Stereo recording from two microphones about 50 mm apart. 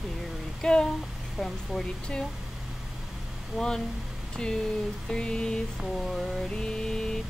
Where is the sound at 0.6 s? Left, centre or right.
Centre.